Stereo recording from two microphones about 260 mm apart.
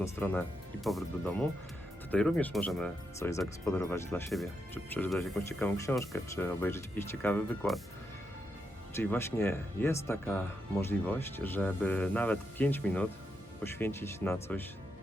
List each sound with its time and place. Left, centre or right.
0.0 s speech: centre
9.0 s speech: centre